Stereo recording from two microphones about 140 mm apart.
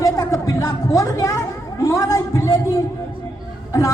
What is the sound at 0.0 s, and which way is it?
Music, 25° left (ahead or behind).